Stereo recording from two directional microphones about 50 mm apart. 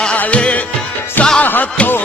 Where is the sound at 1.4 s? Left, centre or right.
Left.